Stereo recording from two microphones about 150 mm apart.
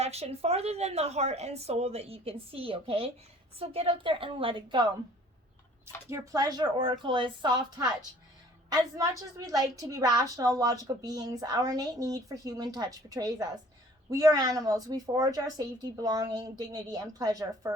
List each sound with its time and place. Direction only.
0.0 s a woman's voice: 45° right (ahead or behind)
6.1 s a woman's voice: 20° right (ahead or behind)